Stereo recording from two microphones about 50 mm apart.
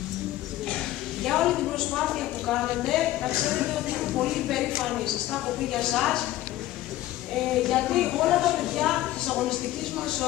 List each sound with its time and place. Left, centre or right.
0.7 s a sound: centre
3.3 s speech: centre
4.2 s a woman's voice: centre
7.6 s a woman's voice: centre